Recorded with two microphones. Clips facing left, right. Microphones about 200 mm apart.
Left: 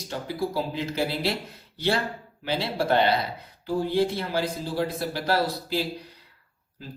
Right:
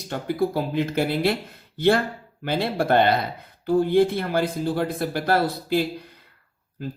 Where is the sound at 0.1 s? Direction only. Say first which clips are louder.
Right 5 dB; 55° right (ahead or behind).